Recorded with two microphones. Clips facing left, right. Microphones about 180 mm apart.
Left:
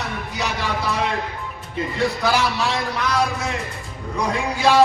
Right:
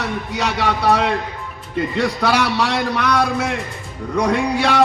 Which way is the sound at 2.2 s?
70° right (ahead or behind).